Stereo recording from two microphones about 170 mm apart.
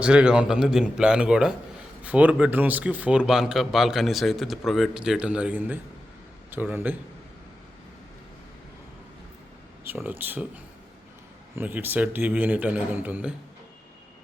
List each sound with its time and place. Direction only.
0.0 s a man's voice: 5° right (ahead or behind)
9.8 s a man's voice: 10° right (ahead or behind)
11.5 s a man's voice: 10° right (ahead or behind)